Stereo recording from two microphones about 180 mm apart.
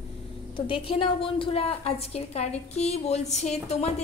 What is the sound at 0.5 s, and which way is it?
A woman's voice, 30° left (ahead or behind).